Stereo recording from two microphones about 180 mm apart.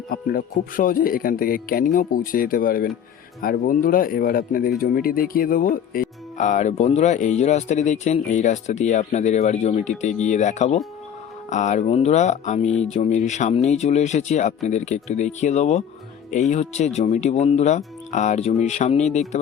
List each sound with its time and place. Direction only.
0.1 s speech: 50° left (ahead or behind)